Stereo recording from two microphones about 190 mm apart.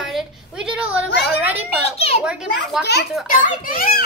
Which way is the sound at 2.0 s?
30° left (ahead or behind).